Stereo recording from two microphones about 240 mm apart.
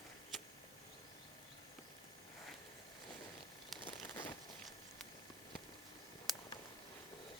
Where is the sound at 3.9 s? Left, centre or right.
Left.